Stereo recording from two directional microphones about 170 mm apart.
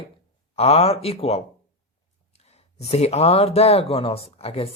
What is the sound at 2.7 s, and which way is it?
Speech, 40° left (ahead or behind).